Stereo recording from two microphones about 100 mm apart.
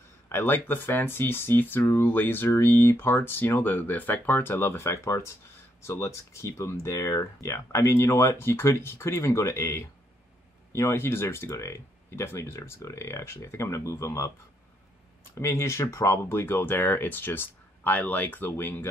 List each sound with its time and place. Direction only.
0.3 s speech: 20° left (ahead or behind)
15.3 s speech: 30° left (ahead or behind)